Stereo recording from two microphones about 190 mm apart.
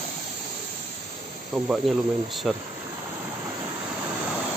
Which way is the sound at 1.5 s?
Centre (ahead or behind).